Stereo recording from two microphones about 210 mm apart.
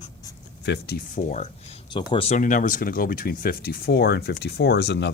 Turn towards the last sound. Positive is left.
turn(degrees=55)  # may be behind; listen again after turning